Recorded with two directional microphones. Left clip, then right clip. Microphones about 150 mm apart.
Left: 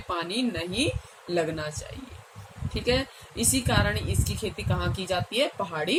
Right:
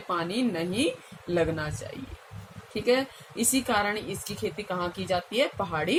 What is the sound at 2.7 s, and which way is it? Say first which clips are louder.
A woman's voice: right 2 dB; 35° right (ahead or behind).